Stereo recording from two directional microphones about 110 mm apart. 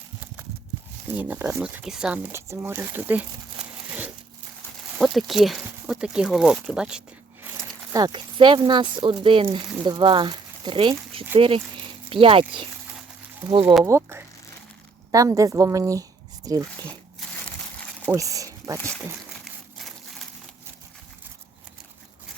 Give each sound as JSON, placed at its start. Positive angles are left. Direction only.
{"t": 1.1, "sound": "speech", "side_deg": -15}
{"t": 1.6, "sound": "speech", "side_deg": -5}
{"t": 2.3, "sound": "speech", "side_deg": -25}
{"t": 4.9, "sound": "speech", "side_deg": 0}
{"t": 7.9, "sound": "speech", "side_deg": -40}
{"t": 13.4, "sound": "speech", "side_deg": -35}
{"t": 13.8, "sound": "speech", "side_deg": -25}
{"t": 18.2, "sound": "a sound", "side_deg": -30}